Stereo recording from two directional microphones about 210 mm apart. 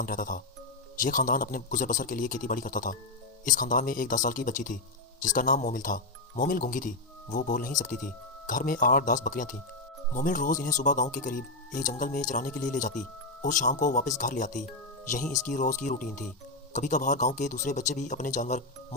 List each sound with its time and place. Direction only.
0.0 s speech: 40° left (ahead or behind)